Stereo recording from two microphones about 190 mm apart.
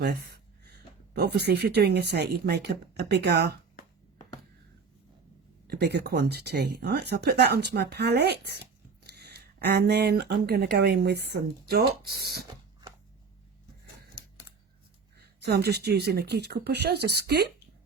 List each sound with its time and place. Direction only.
0.0 s speech: 55° right (ahead or behind)
5.6 s speech: 60° right (ahead or behind)
15.2 s speech: 60° right (ahead or behind)